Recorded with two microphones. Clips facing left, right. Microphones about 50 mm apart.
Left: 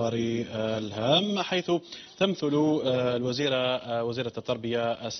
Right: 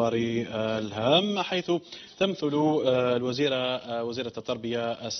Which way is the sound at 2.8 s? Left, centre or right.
Right.